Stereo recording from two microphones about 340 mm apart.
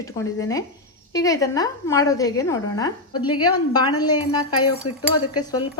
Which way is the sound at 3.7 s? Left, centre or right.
Centre.